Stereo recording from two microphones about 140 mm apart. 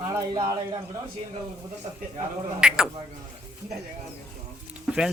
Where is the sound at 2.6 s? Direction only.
5° right (ahead or behind).